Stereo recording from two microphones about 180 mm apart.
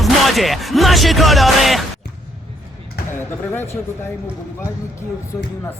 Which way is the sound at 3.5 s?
15° left (ahead or behind).